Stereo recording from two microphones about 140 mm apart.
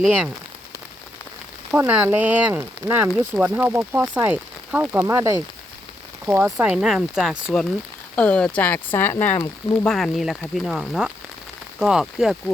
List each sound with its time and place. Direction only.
0.0 s speech: 10° right (ahead or behind)
1.7 s speech: 10° right (ahead or behind)
6.4 s speech: 5° right (ahead or behind); by 9.9 s 10° left (ahead or behind)
9.9 s speech: centre (ahead or behind)